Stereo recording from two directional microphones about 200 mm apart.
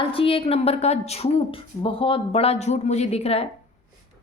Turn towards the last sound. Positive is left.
turn(degrees=30)  # may be behind; listen again after turning